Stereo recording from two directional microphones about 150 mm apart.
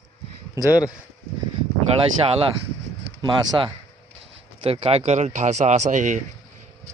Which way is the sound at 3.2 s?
30° right (ahead or behind).